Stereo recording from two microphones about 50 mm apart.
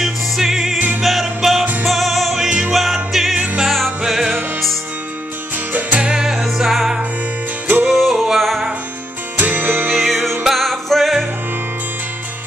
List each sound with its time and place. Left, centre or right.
0.0 s music: centre
5.7 s music: right
6.0 s music: centre
7.6 s music: right
7.9 s music: centre
9.4 s music: right
9.8 s music: centre